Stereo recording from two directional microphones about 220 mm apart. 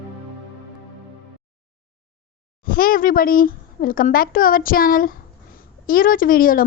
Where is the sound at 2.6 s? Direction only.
40° left (ahead or behind).